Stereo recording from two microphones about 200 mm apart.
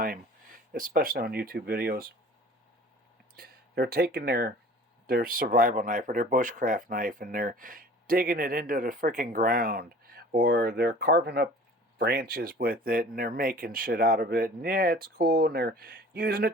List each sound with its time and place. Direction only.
0.7 s speech: 45° right (ahead or behind)
3.3 s speech: 50° right (ahead or behind)